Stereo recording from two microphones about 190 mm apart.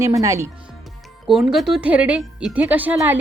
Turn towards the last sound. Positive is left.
turn(degrees=-10)  # may be behind; listen again after turning